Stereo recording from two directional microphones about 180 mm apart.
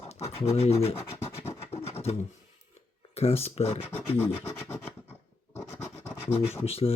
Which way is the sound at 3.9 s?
15° left (ahead or behind).